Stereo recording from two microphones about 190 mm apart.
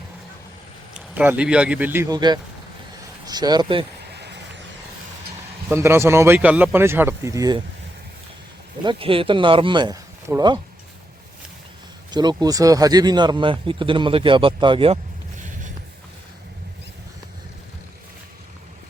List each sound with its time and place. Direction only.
0.9 s speech: 10° right (ahead or behind); by 3.8 s 25° right (ahead or behind)
4.1 s a sound: 60° right (ahead or behind)
5.6 s speech: 15° right (ahead or behind)
8.8 s speech: 25° right (ahead or behind)
12.1 s speech: 20° right (ahead or behind)